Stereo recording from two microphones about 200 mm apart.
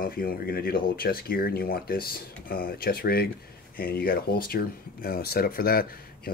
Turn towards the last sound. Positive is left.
turn(degrees=50)  # may be behind; listen again after turning